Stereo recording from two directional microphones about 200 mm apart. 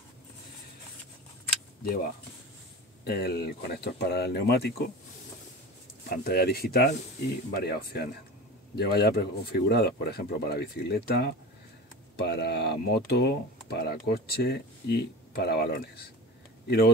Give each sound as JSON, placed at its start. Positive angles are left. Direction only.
{"t": 3.0, "sound": "speech", "side_deg": 50}
{"t": 6.0, "sound": "speech", "side_deg": 50}